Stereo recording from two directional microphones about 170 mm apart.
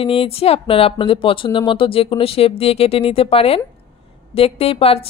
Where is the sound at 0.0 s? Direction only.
35° left (ahead or behind).